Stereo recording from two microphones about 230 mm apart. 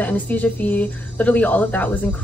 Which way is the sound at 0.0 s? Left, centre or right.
Centre.